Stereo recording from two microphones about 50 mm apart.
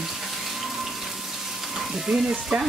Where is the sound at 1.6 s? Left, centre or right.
Centre.